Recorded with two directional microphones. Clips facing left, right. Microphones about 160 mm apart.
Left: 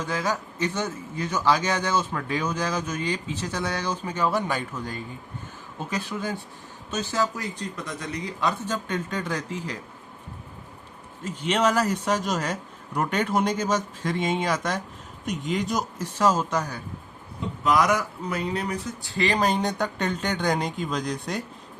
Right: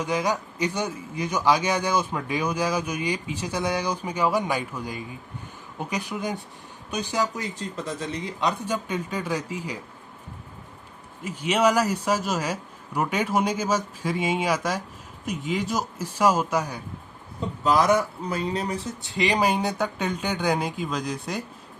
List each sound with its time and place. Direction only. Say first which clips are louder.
0.0 s a man's voice: right 2 dB; 15° right (ahead or behind)
11.2 s a man's voice: right 1 dB; 10° right (ahead or behind)
17.6 s speech: right 2 dB; 30° right (ahead or behind)
19.1 s speech: right 1 dB; 15° right (ahead or behind)